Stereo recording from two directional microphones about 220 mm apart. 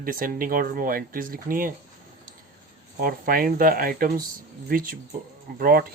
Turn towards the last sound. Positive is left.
turn(degrees=-40)  # may be behind; listen again after turning